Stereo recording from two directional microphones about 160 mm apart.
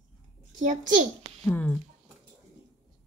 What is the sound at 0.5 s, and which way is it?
Speech, 50° right (ahead or behind).